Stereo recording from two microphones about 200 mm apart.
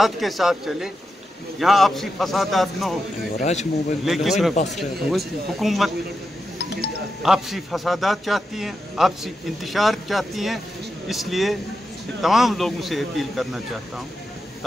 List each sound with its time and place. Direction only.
0.0 s a man's voice: centre (ahead or behind)
3.3 s speech: 35° left (ahead or behind)
4.0 s a man's voice: centre (ahead or behind)
7.2 s a man's voice: centre (ahead or behind)